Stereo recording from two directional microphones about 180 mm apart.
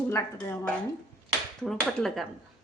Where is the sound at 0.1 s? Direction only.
15° left (ahead or behind).